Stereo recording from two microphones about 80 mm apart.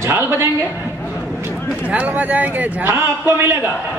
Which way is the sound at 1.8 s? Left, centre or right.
Centre.